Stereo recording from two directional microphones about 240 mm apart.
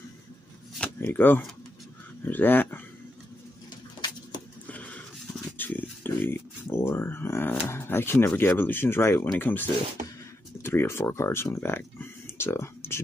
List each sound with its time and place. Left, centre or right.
0.7 s a sound: centre
2.2 s speech: centre
4.6 s horse: centre
5.6 s grunt: centre
10.0 s a sound: right
10.6 s speech: centre